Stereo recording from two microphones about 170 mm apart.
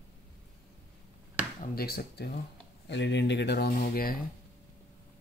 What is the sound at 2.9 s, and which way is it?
Speech, 90° left.